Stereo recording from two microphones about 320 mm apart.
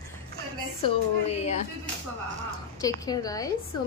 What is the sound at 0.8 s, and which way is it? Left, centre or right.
Speech, centre.